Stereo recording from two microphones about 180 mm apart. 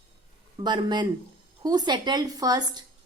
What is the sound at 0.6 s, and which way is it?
Speech, 25° right (ahead or behind).